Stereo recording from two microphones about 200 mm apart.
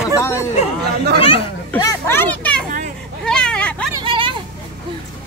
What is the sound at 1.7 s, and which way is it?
Speech, 15° left (ahead or behind).